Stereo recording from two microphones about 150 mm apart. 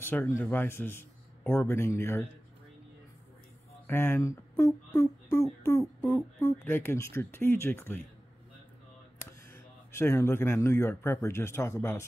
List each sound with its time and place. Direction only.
0.0 s a man's voice: 15° left (ahead or behind)
3.8 s speech: 15° left (ahead or behind)
9.5 s speech: 15° left (ahead or behind)